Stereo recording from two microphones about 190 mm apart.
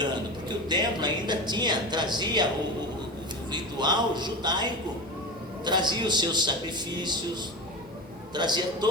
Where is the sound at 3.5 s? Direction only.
25° right (ahead or behind).